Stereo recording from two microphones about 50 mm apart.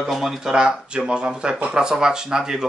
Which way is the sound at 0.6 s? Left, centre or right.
Centre.